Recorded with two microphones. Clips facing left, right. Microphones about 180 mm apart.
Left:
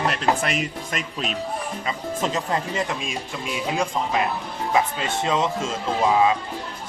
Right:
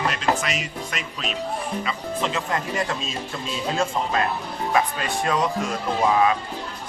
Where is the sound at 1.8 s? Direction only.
40° left (ahead or behind).